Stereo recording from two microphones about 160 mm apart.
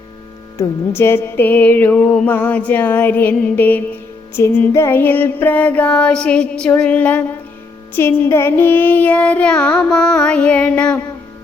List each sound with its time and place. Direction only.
0.5 s mantra: 15° left (ahead or behind)